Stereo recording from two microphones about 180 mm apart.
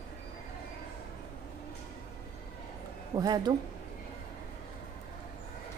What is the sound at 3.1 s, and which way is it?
Speech, 20° right (ahead or behind).